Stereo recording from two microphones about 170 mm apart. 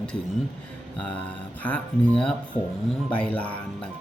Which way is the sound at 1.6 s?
10° left (ahead or behind).